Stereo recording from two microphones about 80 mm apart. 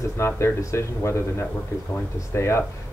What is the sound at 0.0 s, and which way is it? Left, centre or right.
Speech, left.